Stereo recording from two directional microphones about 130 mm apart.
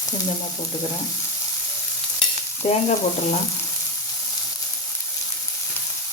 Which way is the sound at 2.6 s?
55° left (ahead or behind).